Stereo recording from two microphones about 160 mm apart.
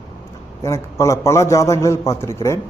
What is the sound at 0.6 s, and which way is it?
A man's voice, 20° left (ahead or behind).